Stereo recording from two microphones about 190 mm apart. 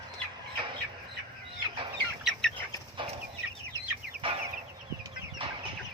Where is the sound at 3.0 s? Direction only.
25° right (ahead or behind).